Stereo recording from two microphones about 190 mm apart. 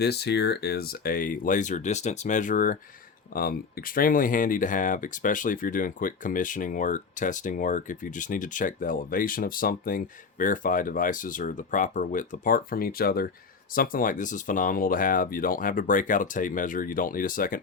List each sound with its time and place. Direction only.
0.0 s speech: 60° left (ahead or behind)